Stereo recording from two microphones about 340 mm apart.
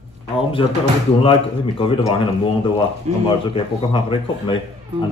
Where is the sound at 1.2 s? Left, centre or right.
Centre.